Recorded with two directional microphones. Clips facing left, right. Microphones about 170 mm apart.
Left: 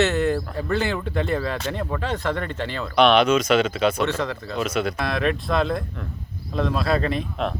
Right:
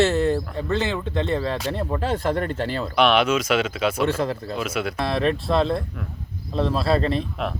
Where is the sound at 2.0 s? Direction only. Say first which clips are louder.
Right 3 dB; 40° right (ahead or behind).